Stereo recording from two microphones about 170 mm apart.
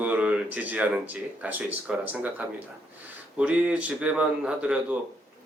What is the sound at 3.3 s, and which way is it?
Speech, 5° right (ahead or behind).